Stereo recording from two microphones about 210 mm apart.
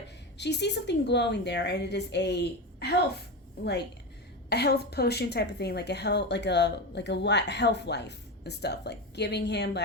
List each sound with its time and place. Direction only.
0.3 s a woman's voice: 55° left (ahead or behind)